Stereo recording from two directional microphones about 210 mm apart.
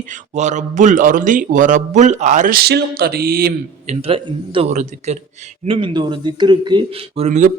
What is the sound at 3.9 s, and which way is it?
A man's voice, 25° right (ahead or behind).